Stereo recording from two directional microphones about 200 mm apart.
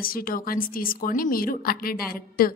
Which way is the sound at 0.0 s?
45° left (ahead or behind).